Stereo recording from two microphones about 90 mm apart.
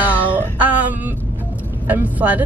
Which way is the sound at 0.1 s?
20° left (ahead or behind).